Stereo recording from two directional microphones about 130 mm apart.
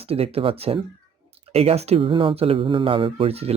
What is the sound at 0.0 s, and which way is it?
Speech, 50° right (ahead or behind).